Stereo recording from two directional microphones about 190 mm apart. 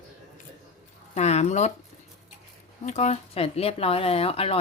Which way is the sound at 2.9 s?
35° left (ahead or behind).